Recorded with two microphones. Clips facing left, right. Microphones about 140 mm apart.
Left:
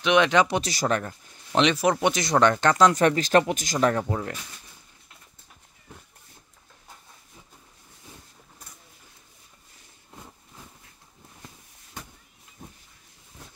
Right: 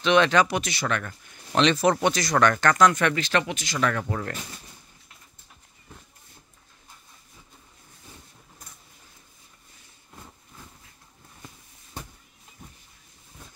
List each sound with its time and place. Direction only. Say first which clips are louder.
0.0 s speech: even; 15° left (ahead or behind); by 1.1 s 35° left (ahead or behind)
1.5 s speech: right 1 dB; 15° left (ahead or behind); by 3.9 s 45° left (ahead or behind)
4.0 s speech: left 1 dB; 15° left (ahead or behind)